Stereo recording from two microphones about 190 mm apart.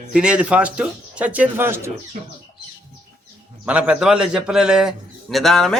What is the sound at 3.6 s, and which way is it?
A man's voice, 5° right (ahead or behind).